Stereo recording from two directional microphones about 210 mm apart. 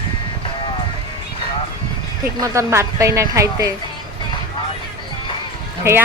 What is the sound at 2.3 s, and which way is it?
Speech, 15° right (ahead or behind).